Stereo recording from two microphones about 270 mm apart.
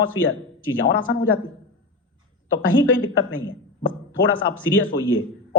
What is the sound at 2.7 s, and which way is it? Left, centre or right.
Speech, left.